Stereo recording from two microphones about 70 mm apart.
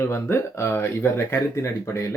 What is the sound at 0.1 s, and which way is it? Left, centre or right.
Speech, left.